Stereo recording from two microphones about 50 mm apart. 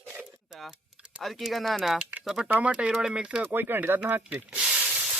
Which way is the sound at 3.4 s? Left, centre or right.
Right.